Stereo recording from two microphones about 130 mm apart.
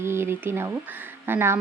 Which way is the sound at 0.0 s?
20° right (ahead or behind).